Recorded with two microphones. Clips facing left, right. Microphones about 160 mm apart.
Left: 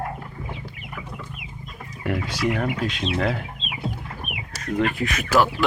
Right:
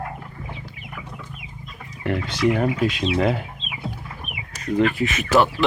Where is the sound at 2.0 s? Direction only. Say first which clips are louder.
Right 3 dB; 5° left (ahead or behind).